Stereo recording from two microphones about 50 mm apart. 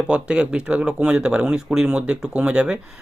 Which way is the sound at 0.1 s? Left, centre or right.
Right.